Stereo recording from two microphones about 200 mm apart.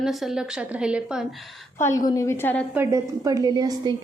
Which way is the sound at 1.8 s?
15° left (ahead or behind).